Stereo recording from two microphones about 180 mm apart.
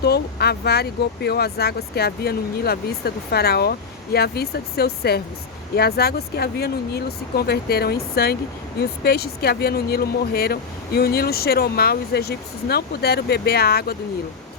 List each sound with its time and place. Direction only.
0.0 s speech: 65° left (ahead or behind)